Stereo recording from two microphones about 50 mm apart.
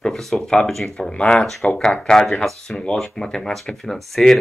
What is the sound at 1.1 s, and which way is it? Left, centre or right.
Speech, centre.